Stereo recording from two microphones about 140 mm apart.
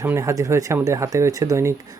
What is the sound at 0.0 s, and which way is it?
Speech, 20° right (ahead or behind).